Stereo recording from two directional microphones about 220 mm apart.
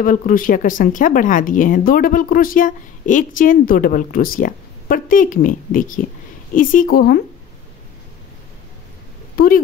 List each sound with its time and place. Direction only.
0.0 s speech: 40° left (ahead or behind)
9.4 s a woman's voice: 45° left (ahead or behind)